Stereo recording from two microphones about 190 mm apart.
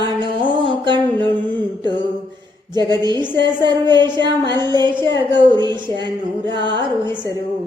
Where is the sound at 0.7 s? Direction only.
25° right (ahead or behind).